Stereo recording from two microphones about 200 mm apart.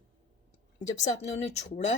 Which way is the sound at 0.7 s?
35° left (ahead or behind).